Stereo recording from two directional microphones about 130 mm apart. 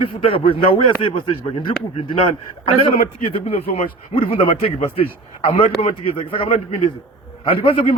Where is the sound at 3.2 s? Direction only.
50° left (ahead or behind).